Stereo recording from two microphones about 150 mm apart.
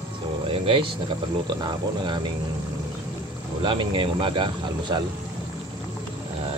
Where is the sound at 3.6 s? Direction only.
35° right (ahead or behind).